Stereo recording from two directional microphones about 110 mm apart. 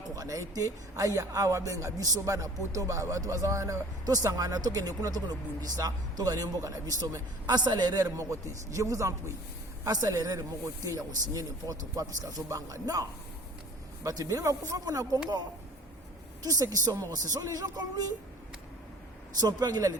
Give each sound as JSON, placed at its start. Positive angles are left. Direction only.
{"t": 0.2, "sound": "a man's voice", "side_deg": -30}
{"t": 16.4, "sound": "a woman's voice", "side_deg": -35}
{"t": 19.5, "sound": "a man's voice", "side_deg": -40}